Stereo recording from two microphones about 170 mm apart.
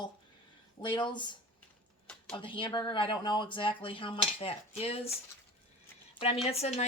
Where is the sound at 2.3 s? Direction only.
30° left (ahead or behind).